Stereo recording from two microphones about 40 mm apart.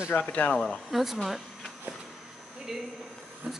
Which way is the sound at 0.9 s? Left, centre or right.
Centre.